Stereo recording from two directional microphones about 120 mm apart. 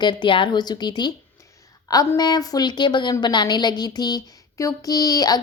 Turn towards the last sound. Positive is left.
turn(degrees=30)  # may be behind; listen again after turning